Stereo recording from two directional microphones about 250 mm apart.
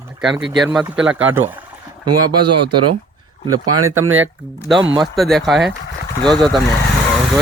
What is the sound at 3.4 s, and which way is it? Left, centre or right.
Speech, right.